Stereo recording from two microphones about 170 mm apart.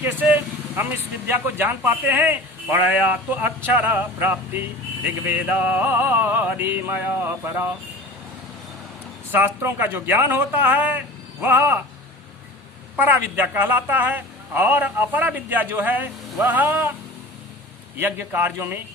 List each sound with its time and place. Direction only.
0.0 s speech: 10° right (ahead or behind)
9.3 s speech: 10° right (ahead or behind)
13.0 s speech: 10° right (ahead or behind)
17.9 s speech: 10° right (ahead or behind)